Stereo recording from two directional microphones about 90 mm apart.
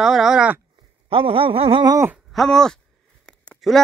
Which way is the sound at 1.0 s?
80° right.